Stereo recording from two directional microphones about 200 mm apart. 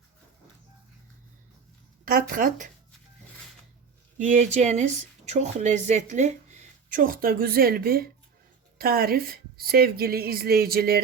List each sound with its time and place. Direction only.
2.0 s a woman's voice: 45° right (ahead or behind)
4.2 s a woman's voice: 40° right (ahead or behind)